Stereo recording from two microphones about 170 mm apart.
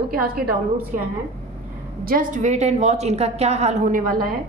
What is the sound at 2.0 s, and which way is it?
A woman's voice, 55° right (ahead or behind).